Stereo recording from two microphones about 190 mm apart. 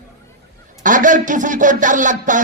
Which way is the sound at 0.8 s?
45° right (ahead or behind).